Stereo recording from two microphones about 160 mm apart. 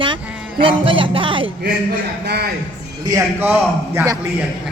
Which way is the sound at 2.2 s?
90° right.